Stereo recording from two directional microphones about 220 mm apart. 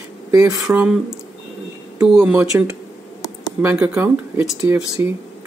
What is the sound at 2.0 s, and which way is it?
Speech, 5° right (ahead or behind).